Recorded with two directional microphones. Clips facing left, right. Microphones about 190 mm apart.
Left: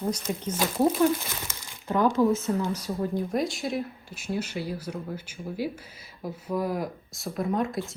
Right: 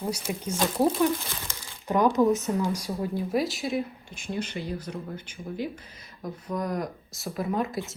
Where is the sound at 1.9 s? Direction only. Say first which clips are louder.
Right 1 dB; 15° right (ahead or behind).